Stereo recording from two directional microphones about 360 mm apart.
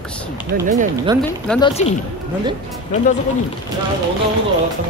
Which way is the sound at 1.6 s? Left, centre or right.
Centre.